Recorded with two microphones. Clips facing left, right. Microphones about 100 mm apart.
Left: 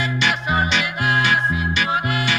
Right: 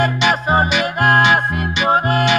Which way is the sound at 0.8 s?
50° right (ahead or behind).